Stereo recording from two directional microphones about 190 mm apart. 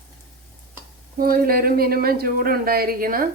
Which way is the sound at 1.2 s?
50° right (ahead or behind).